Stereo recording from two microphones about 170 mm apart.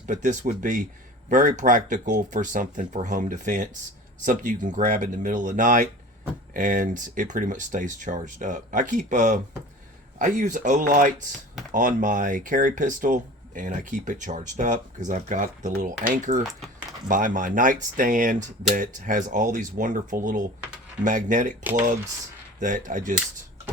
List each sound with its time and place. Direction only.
0.1 s speech: 45° right (ahead or behind)
16.4 s speech: centre (ahead or behind)
17.1 s speech: 50° right (ahead or behind)
22.6 s speech: 50° right (ahead or behind)